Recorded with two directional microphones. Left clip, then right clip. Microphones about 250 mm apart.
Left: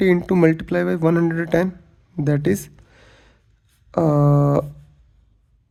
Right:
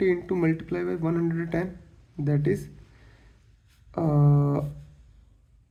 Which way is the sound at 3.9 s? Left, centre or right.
Left.